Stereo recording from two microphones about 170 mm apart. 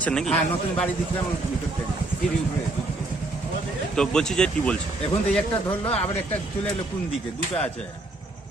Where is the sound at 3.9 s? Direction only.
5° left (ahead or behind).